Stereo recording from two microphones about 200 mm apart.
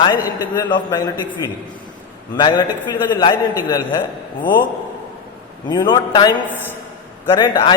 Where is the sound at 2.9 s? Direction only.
20° left (ahead or behind).